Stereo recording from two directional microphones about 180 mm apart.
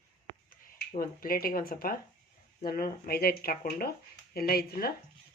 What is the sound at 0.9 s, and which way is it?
Speech, 55° left (ahead or behind).